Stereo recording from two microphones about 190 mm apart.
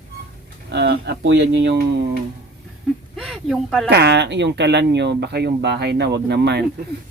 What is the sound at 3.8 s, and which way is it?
Speech, 60° right (ahead or behind).